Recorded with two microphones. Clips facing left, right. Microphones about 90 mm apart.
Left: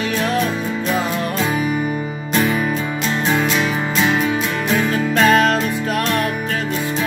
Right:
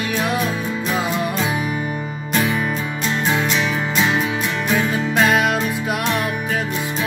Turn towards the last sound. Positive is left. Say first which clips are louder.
# left 3 dB
turn(degrees=-10)  # may be behind; listen again after turning